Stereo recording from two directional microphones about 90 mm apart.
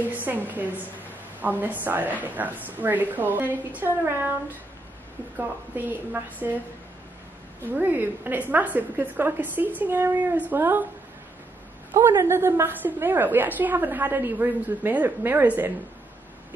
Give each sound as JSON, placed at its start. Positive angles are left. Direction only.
{"t": 0.0, "sound": "a woman's voice", "side_deg": -20}
{"t": 5.7, "sound": "a woman's voice", "side_deg": -20}
{"t": 7.7, "sound": "a woman's voice", "side_deg": -20}
{"t": 12.0, "sound": "a woman's voice", "side_deg": -25}